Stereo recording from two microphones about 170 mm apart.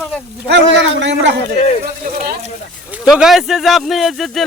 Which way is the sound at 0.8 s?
90° right.